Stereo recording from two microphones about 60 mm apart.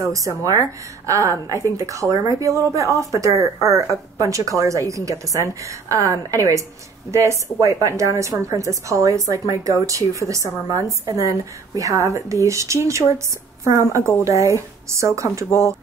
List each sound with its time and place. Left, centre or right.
0.0 s a woman's voice: right